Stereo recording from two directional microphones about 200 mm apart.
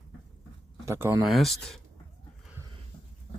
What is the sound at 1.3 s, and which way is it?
Speech, centre (ahead or behind).